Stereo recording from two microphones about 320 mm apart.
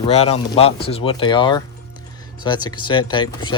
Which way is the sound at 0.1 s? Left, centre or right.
Centre.